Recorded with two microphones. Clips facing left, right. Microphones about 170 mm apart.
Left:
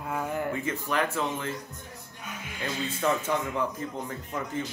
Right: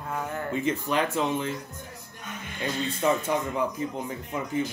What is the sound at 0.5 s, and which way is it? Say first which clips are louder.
A man's voice: right 3 dB; 20° right (ahead or behind).